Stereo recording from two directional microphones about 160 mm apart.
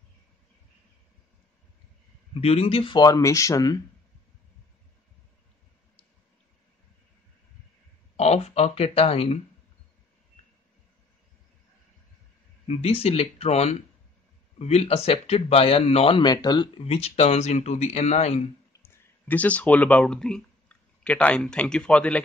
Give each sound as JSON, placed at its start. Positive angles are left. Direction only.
{"t": 2.3, "sound": "speech", "side_deg": 35}
{"t": 8.2, "sound": "speech", "side_deg": 40}
{"t": 12.6, "sound": "speech", "side_deg": 40}
{"t": 18.7, "sound": "speech", "side_deg": 15}